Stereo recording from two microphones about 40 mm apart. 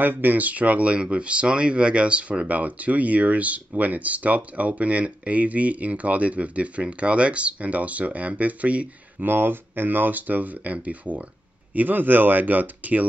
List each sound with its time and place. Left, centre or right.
0.0 s speech: right
9.2 s speech: right
11.7 s speech: right